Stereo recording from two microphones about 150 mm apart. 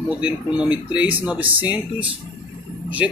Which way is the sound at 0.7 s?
10° right (ahead or behind).